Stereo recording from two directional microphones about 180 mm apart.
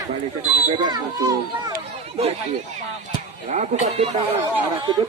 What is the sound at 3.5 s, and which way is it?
Speech, 40° right (ahead or behind).